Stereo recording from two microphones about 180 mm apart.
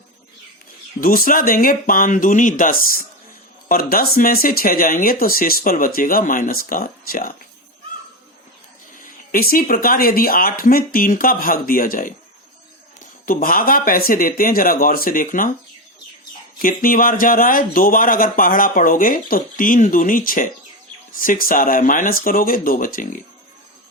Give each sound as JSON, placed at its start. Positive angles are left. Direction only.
{"t": 1.0, "sound": "speech", "side_deg": 50}
{"t": 9.0, "sound": "speech", "side_deg": 55}
{"t": 13.2, "sound": "speech", "side_deg": 50}
{"t": 16.6, "sound": "speech", "side_deg": 50}